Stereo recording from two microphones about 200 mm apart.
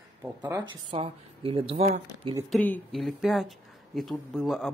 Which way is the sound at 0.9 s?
30° right (ahead or behind).